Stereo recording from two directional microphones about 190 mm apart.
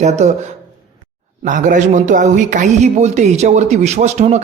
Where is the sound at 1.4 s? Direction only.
45° right (ahead or behind).